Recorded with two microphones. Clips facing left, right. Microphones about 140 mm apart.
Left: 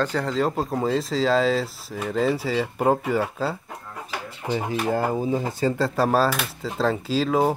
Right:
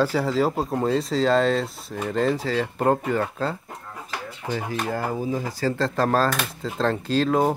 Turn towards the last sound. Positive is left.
turn(degrees=0)  # may be behind; listen again after turning